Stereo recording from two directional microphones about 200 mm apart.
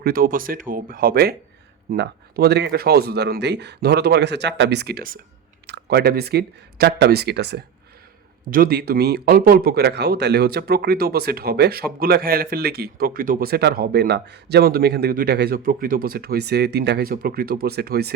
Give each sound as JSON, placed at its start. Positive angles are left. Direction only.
{"t": 0.0, "sound": "speech", "side_deg": -45}